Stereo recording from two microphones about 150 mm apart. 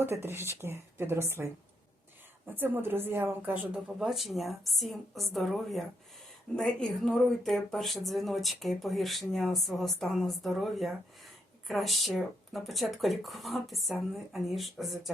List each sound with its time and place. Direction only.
0.0 s speech: 15° right (ahead or behind)
2.6 s speech: 15° right (ahead or behind)